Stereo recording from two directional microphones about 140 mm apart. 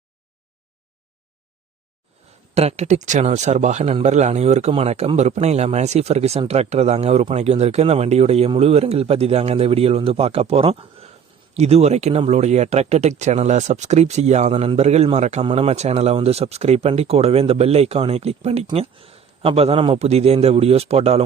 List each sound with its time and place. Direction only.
2.6 s speech: 50° right (ahead or behind)